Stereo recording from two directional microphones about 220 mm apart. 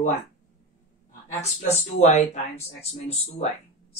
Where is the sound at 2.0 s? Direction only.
30° left (ahead or behind).